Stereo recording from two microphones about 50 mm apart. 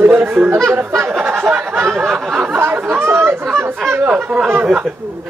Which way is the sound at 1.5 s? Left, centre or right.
Right.